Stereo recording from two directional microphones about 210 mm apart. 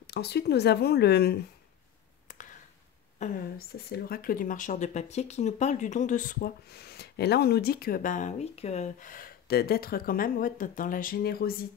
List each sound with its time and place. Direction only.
0.0 s speech: 50° left (ahead or behind)
2.2 s a sound: 35° left (ahead or behind)
3.2 s speech: 45° left (ahead or behind)